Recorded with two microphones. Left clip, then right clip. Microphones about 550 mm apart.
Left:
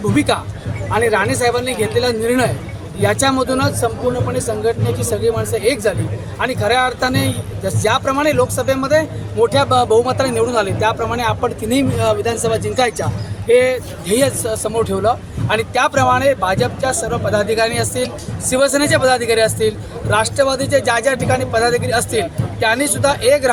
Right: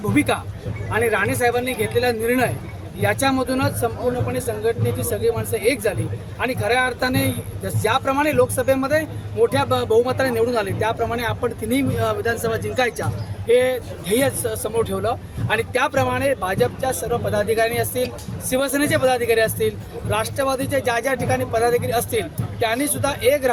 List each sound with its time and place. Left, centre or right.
0.0 s speech: right